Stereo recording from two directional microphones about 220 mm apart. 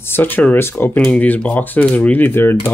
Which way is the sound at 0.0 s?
10° left (ahead or behind).